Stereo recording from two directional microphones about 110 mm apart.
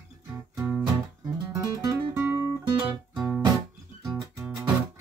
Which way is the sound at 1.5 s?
30° right (ahead or behind).